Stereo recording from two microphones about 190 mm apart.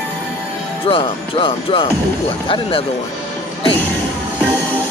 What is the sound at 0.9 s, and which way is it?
Speech, 30° left (ahead or behind).